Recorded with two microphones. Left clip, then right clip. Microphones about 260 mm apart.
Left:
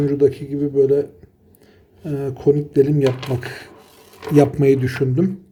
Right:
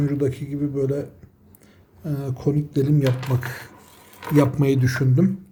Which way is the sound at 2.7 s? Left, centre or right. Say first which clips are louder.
Left 7 dB; right.